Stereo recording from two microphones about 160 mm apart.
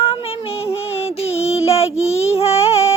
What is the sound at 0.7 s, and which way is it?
Music, 40° left (ahead or behind).